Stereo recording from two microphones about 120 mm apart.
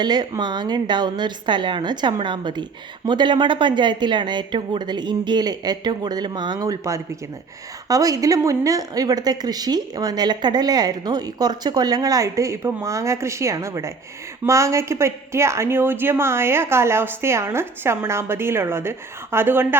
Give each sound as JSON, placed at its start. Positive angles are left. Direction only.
{"t": 0.0, "sound": "a woman's voice", "side_deg": -35}